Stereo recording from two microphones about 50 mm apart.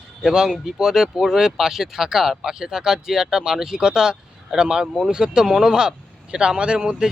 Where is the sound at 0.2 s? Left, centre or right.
Centre.